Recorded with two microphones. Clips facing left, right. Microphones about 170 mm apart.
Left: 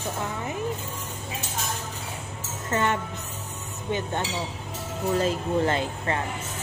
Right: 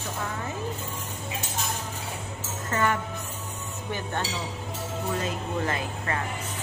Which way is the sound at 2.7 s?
25° left (ahead or behind).